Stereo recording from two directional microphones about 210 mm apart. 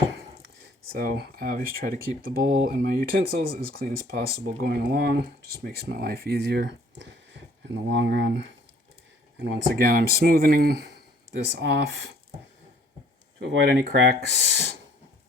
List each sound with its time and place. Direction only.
0.9 s speech: 50° right (ahead or behind)
13.4 s speech: 55° right (ahead or behind)